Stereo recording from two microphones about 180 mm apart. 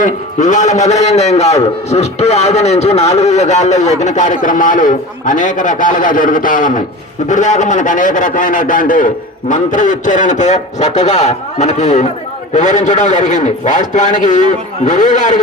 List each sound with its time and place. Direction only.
0.0 s a man's voice: 45° left (ahead or behind)